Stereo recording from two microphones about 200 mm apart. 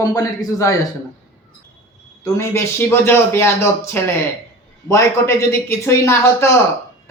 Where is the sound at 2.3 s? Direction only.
10° left (ahead or behind).